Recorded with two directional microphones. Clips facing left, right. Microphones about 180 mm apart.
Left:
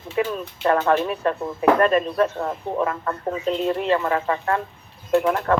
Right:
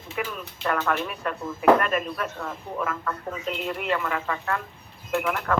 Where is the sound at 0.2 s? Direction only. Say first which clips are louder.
Left 8 dB; 30° left (ahead or behind).